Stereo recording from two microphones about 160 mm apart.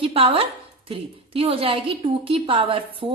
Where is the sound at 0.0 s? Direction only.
35° right (ahead or behind).